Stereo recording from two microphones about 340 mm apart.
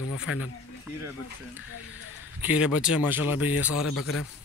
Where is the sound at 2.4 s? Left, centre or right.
Centre.